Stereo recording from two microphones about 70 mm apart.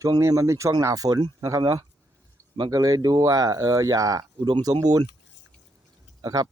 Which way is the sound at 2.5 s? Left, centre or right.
Right.